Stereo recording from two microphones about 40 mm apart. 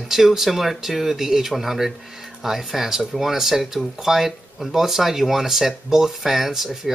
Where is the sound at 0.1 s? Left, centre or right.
Centre.